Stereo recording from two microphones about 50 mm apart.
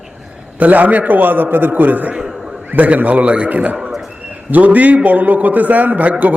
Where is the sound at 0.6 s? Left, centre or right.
Right.